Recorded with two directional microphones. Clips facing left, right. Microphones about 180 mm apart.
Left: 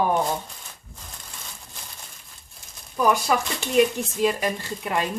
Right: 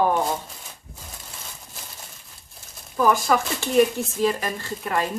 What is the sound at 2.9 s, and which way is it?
Speech, 15° left (ahead or behind).